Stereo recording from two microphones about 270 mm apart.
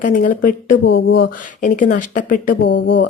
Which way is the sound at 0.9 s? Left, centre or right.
Left.